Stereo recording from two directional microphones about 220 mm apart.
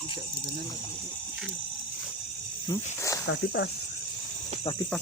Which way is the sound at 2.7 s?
15° left (ahead or behind).